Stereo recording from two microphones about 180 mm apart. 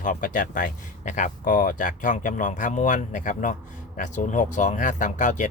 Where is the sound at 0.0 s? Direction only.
50° left (ahead or behind).